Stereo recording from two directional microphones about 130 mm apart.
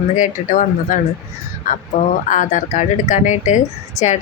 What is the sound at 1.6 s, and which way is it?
Speech, 75° left (ahead or behind).